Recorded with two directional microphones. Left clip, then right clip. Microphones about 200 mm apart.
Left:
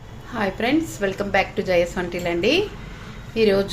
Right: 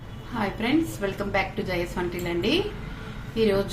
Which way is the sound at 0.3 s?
35° left (ahead or behind).